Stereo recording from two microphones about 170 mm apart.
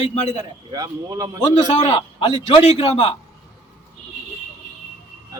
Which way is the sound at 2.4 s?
30° left (ahead or behind).